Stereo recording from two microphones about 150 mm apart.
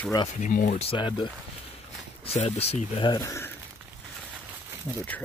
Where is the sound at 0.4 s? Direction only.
60° left (ahead or behind).